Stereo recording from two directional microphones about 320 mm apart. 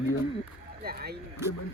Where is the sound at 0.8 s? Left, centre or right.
Right.